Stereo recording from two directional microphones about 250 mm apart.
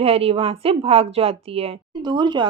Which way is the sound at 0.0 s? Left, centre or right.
Right.